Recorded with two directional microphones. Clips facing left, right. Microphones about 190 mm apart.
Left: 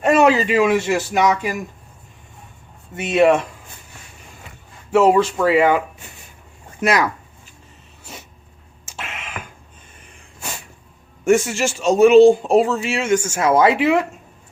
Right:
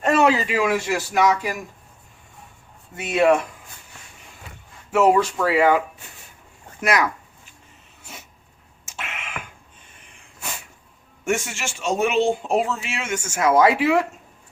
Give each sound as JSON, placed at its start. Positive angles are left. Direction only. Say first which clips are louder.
{"t": 0.0, "sound": "a man's voice", "louder": "left 4 dB", "side_deg": 15}
{"t": 2.9, "sound": "a man's voice", "louder": "left 3 dB", "side_deg": 25}
{"t": 4.9, "sound": "a man's voice", "louder": "left 3 dB", "side_deg": 30}
{"t": 8.9, "sound": "a sound", "louder": "left 2 dB", "side_deg": 35}
{"t": 11.3, "sound": "speech", "louder": "left 9 dB", "side_deg": 35}